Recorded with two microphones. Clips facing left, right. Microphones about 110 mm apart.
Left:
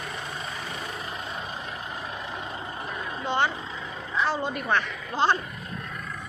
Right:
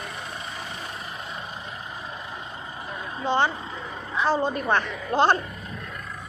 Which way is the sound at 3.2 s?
30° right (ahead or behind).